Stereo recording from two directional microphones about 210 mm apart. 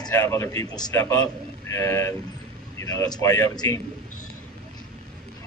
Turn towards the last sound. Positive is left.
turn(degrees=15)  # may be behind; listen again after turning